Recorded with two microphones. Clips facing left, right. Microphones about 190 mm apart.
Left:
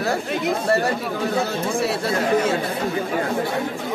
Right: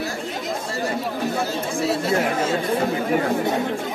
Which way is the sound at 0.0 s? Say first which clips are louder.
Left 5 dB; 65° left (ahead or behind).